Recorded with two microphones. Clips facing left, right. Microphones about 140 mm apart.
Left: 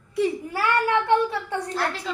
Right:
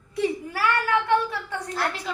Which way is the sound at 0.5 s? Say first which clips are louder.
Left 3 dB; 25° left (ahead or behind).